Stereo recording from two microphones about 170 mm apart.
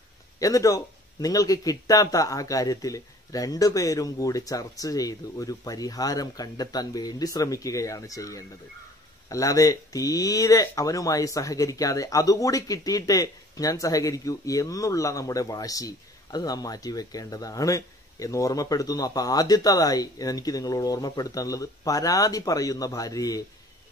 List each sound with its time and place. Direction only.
0.4 s speech: 20° left (ahead or behind)